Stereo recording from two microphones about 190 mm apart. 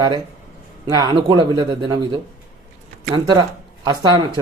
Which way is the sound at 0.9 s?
20° right (ahead or behind).